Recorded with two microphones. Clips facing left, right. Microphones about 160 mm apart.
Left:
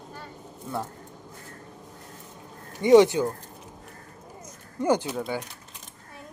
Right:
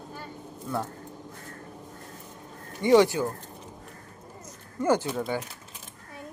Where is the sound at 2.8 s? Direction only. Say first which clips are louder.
Left 3 dB; 20° left (ahead or behind).